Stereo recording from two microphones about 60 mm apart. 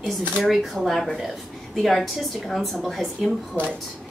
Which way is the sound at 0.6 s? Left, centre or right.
Centre.